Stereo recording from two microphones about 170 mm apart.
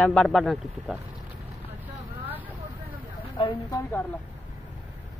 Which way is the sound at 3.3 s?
30° left (ahead or behind).